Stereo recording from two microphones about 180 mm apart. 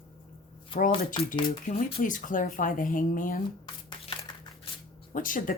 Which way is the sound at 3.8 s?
30° left (ahead or behind).